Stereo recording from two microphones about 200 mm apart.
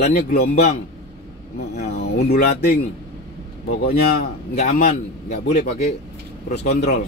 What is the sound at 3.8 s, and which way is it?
A man's voice, 50° left (ahead or behind).